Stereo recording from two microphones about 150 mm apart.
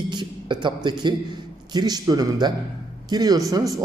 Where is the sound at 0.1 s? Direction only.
30° right (ahead or behind).